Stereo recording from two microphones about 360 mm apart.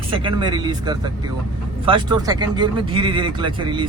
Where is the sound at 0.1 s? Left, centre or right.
Centre.